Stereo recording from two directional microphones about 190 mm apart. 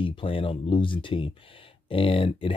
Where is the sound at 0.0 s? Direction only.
25° left (ahead or behind).